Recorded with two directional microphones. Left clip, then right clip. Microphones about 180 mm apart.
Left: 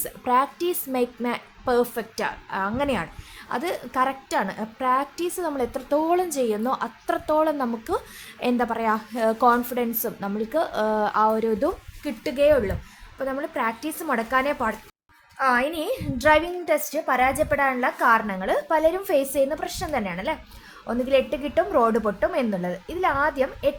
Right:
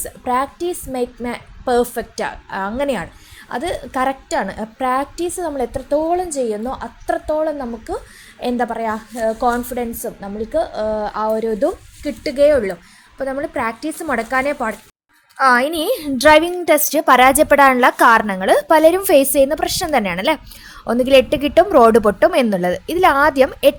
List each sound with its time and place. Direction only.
0.0 s a woman's voice: 10° right (ahead or behind)
12.0 s a woman's voice: 25° right (ahead or behind)
15.4 s a woman's voice: 35° right (ahead or behind); by 18.3 s 60° right (ahead or behind)
18.3 s a woman's voice: 35° right (ahead or behind)